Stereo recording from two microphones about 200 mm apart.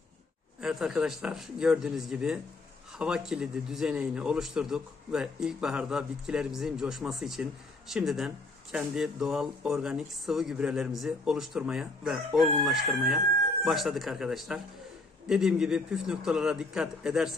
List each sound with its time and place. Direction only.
0.6 s speech: centre (ahead or behind)